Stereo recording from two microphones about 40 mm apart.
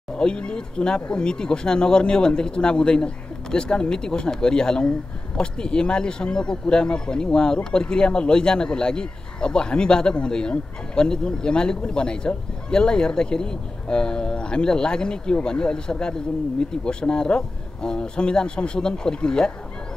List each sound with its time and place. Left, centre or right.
0.1 s speech: left